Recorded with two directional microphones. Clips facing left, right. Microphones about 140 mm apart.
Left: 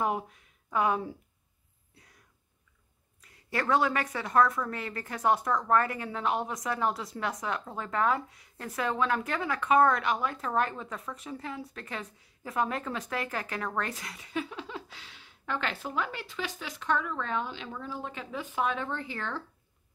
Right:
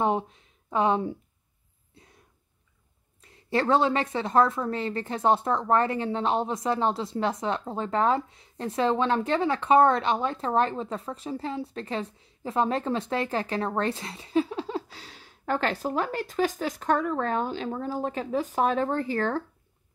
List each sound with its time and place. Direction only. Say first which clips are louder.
0.0 s speech: right 5 dB; 25° right (ahead or behind)
2.0 s a sound: right 5 dB; 25° right (ahead or behind)
3.2 s a woman's voice: right 7 dB; 25° right (ahead or behind); by 19.4 s 45° right (ahead or behind)